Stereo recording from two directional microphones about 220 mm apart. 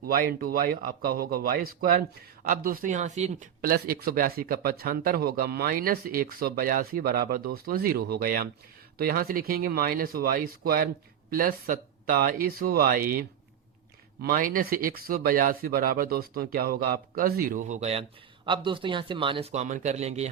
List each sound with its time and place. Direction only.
0.0 s speech: 40° right (ahead or behind)